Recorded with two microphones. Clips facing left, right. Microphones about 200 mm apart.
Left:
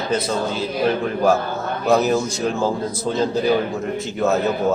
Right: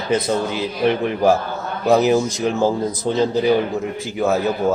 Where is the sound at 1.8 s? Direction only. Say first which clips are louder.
Right 3 dB; 15° right (ahead or behind).